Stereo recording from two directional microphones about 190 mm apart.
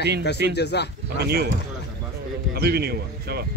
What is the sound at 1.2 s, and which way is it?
Speech, 55° right (ahead or behind).